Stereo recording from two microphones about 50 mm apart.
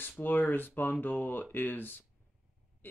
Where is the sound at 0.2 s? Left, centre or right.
Left.